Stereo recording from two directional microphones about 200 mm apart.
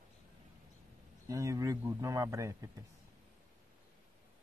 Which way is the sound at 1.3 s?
15° right (ahead or behind).